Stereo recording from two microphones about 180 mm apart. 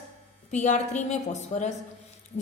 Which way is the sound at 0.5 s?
40° left (ahead or behind).